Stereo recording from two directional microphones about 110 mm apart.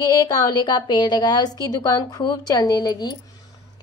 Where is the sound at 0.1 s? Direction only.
40° left (ahead or behind).